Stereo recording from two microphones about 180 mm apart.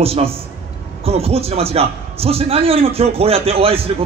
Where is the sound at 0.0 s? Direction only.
35° right (ahead or behind).